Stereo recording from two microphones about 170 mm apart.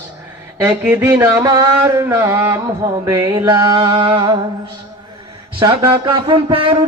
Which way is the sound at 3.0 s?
20° right (ahead or behind).